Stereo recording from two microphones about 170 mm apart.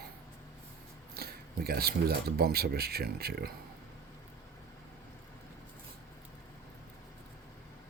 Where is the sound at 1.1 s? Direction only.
65° right (ahead or behind).